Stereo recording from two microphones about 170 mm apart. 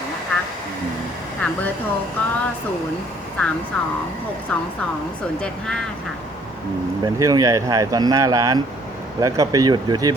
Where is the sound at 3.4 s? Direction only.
5° left (ahead or behind).